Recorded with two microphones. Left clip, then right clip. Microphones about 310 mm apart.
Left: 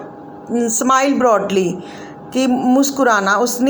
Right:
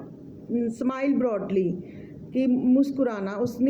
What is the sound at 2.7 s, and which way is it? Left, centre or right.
Speech, right.